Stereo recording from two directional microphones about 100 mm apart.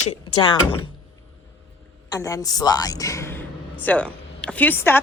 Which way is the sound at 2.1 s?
35° left (ahead or behind).